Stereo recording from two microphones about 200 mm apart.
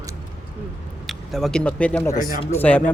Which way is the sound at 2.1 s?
45° left (ahead or behind).